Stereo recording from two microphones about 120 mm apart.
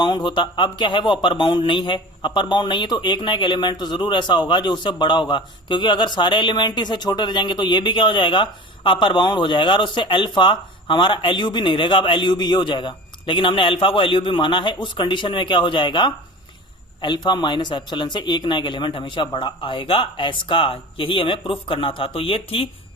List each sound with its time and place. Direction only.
0.0 s speech: 40° left (ahead or behind)